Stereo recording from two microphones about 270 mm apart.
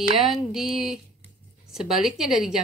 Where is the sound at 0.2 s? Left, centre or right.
Centre.